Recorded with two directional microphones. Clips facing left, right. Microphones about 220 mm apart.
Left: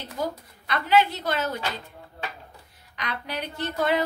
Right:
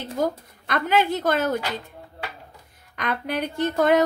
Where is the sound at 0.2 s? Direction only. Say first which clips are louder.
Right 5 dB; 50° right (ahead or behind).